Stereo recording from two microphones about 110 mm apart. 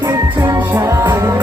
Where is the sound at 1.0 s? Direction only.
20° right (ahead or behind).